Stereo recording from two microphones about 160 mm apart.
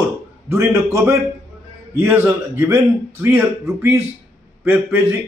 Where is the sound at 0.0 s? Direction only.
15° right (ahead or behind).